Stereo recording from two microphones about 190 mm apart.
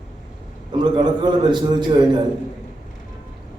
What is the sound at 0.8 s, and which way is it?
A man's voice, 25° right (ahead or behind).